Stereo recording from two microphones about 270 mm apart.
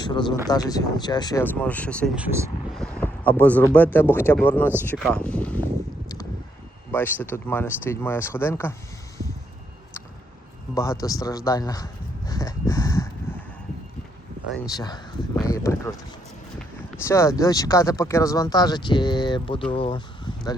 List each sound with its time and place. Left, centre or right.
0.0 s speech: centre
6.9 s speech: centre
10.8 s speech: centre
12.3 s a sound: centre
14.7 s speech: centre